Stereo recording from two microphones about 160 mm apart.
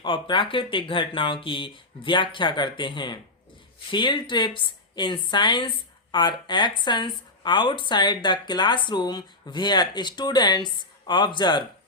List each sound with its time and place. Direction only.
0.0 s a woman's voice: 30° left (ahead or behind)